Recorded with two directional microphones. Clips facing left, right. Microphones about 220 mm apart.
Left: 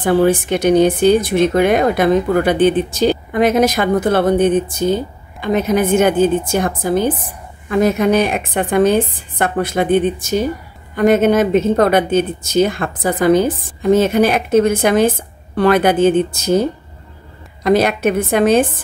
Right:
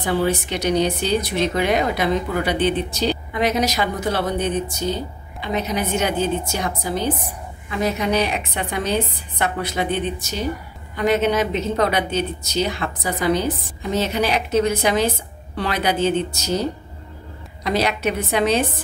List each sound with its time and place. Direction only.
0.0 s speech: 50° left (ahead or behind)
17.6 s speech: 50° left (ahead or behind)